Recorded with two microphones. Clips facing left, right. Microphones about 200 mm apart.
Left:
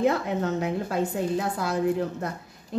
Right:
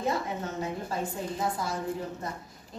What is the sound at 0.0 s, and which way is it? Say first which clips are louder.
Speech: left 7 dB; 70° left (ahead or behind).